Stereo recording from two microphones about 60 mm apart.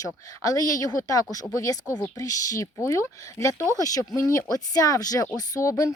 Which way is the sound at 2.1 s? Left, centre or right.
Left.